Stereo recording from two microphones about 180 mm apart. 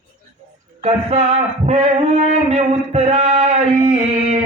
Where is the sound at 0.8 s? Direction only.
35° right (ahead or behind).